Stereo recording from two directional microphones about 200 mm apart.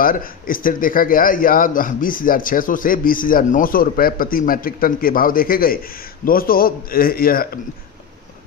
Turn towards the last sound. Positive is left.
turn(degrees=45)  # may be behind; listen again after turning